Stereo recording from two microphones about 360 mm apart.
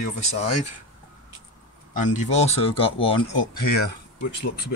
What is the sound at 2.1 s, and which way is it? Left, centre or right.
Speech, centre.